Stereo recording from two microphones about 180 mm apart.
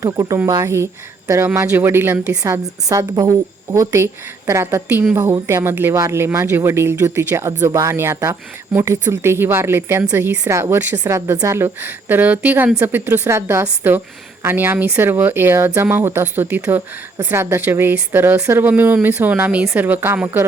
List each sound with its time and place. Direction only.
0.0 s speech: 20° right (ahead or behind)